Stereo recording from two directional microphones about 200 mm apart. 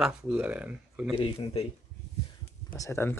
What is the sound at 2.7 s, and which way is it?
Speech, 15° left (ahead or behind).